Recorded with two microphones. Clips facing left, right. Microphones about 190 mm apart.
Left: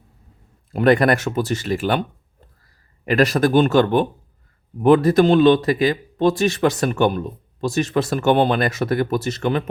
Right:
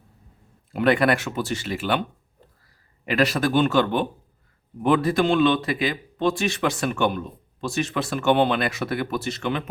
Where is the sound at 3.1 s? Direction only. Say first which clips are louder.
Left 5 dB; 45° left (ahead or behind).